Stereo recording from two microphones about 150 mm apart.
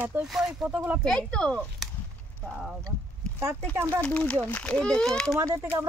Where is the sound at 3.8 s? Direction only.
20° right (ahead or behind).